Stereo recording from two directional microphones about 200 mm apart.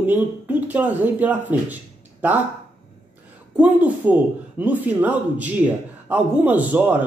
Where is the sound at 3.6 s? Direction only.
5° right (ahead or behind).